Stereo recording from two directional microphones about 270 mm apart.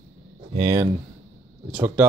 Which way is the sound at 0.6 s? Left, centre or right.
Centre.